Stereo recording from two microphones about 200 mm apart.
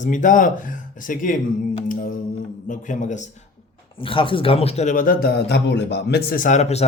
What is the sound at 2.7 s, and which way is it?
Speech, 40° left (ahead or behind).